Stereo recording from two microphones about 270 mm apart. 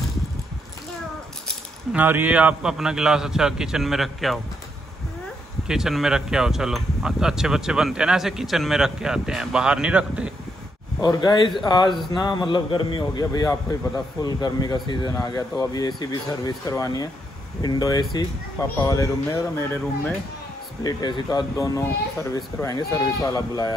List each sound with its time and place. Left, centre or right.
1.9 s speech: centre
5.7 s speech: centre
11.0 s speech: centre